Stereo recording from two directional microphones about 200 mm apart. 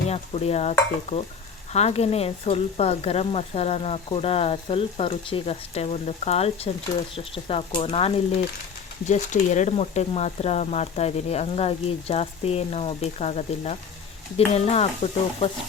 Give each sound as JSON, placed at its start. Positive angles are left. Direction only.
{"t": 0.1, "sound": "speech", "side_deg": 30}